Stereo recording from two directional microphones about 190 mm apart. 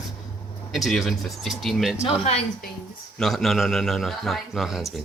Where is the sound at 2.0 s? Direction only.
30° left (ahead or behind).